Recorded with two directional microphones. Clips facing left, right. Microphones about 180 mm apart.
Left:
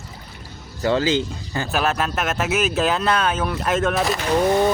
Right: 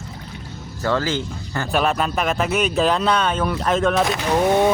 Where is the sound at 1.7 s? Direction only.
Centre (ahead or behind).